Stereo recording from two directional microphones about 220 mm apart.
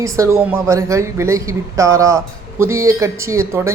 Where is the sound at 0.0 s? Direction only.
15° right (ahead or behind).